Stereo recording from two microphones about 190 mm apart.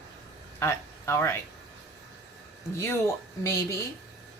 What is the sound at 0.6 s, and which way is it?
Speech, 15° left (ahead or behind).